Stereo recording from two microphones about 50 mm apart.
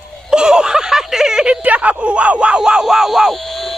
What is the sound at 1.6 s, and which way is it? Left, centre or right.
A man's voice, right.